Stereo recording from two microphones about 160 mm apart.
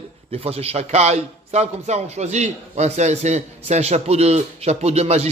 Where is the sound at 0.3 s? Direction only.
40° right (ahead or behind).